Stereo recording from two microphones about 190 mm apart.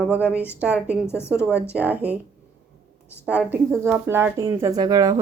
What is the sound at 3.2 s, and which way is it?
Speech, 5° right (ahead or behind).